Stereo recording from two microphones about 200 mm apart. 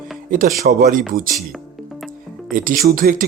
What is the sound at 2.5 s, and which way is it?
Speech, 45° right (ahead or behind).